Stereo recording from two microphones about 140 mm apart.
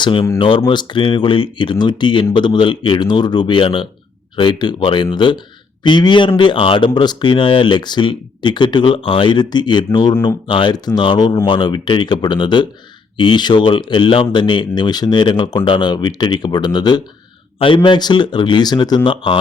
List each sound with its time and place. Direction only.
0.0 s speech: 35° left (ahead or behind)